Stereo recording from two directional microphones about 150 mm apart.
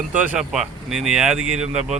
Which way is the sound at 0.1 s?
10° right (ahead or behind).